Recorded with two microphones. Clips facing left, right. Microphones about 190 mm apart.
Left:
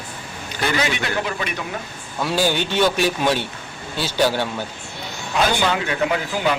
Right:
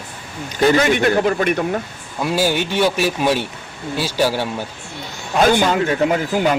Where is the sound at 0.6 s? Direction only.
50° right (ahead or behind).